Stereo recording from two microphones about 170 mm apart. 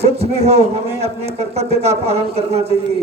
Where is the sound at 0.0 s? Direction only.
40° right (ahead or behind).